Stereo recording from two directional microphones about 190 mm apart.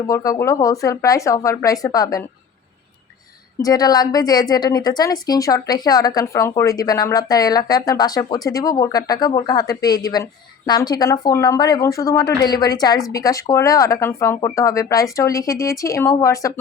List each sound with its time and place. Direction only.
0.1 s speech: 15° left (ahead or behind)
3.6 s a woman's voice: 20° left (ahead or behind)